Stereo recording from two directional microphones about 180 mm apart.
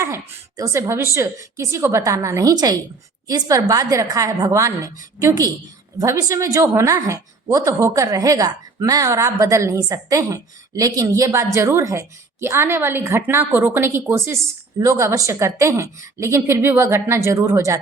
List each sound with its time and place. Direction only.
0.0 s a woman's voice: 15° right (ahead or behind)